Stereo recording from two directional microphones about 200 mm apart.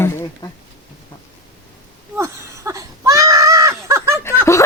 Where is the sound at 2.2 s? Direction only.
15° right (ahead or behind).